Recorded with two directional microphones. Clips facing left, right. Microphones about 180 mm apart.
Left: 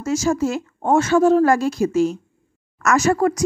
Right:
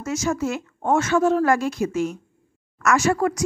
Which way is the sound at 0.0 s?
30° left (ahead or behind).